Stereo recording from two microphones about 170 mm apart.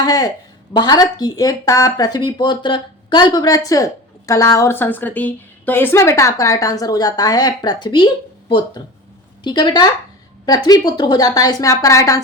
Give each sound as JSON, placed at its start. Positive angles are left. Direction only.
{"t": 0.0, "sound": "speech", "side_deg": 20}